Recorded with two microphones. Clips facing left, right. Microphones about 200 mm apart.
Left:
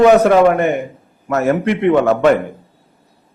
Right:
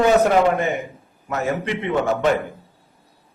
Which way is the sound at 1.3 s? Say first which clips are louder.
Left 8 dB; 70° left (ahead or behind).